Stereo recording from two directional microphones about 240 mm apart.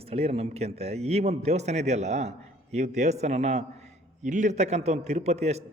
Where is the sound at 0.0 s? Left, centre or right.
Right.